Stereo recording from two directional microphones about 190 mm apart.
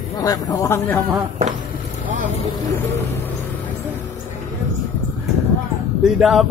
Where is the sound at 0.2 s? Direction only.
20° left (ahead or behind).